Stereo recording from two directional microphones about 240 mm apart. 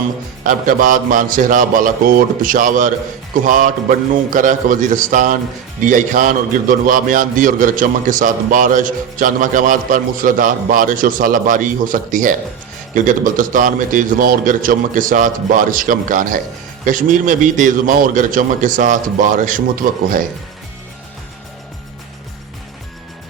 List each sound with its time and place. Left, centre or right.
0.4 s a man's voice: right